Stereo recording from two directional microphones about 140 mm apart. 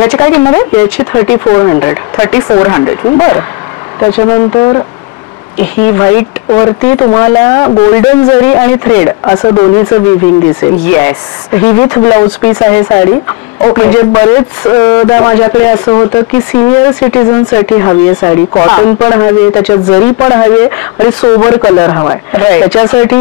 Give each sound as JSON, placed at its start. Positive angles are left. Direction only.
{"t": 0.0, "sound": "speech", "side_deg": 15}
{"t": 1.4, "sound": "speech", "side_deg": 25}
{"t": 5.8, "sound": "speech", "side_deg": 20}
{"t": 9.2, "sound": "speech", "side_deg": 30}
{"t": 9.8, "sound": "speech", "side_deg": 15}
{"t": 21.7, "sound": "a man's voice", "side_deg": 30}
{"t": 22.3, "sound": "speech", "side_deg": 15}